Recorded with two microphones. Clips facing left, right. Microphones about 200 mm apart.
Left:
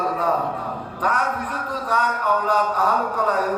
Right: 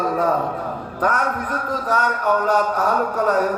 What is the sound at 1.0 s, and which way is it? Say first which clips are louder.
Speech: right 3 dB; 45° right (ahead or behind).